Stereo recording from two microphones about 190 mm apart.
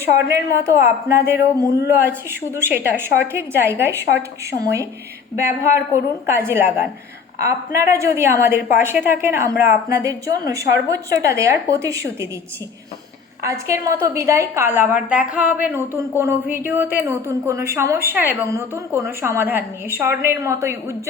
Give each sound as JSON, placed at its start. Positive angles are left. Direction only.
{"t": 0.6, "sound": "a woman's voice", "side_deg": -15}
{"t": 13.4, "sound": "a woman's voice", "side_deg": -15}